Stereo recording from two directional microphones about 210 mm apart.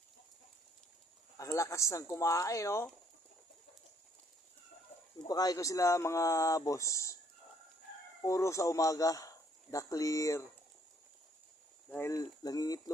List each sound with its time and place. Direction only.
1.4 s speech: 15° left (ahead or behind)
5.2 s speech: 15° left (ahead or behind)
8.2 s speech: 15° left (ahead or behind)
11.9 s speech: 10° left (ahead or behind)